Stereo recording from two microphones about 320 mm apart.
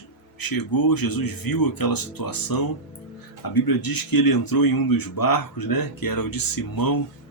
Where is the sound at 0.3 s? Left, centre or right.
Left.